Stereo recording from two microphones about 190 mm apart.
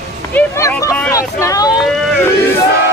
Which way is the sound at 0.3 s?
10° left (ahead or behind).